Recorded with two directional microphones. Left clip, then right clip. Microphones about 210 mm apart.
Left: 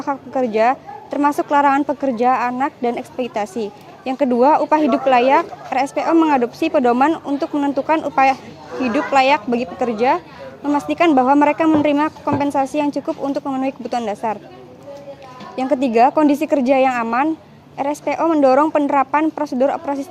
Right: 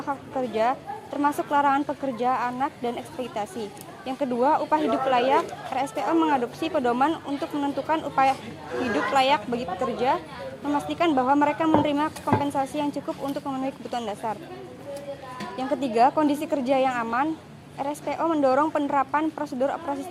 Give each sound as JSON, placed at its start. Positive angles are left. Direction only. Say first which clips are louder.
{"t": 0.0, "sound": "a woman's voice", "louder": "left 8 dB", "side_deg": 50}
{"t": 15.5, "sound": "a woman's voice", "louder": "left 8 dB", "side_deg": 50}